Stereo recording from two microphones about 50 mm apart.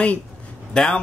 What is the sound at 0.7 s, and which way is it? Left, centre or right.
Speech, centre.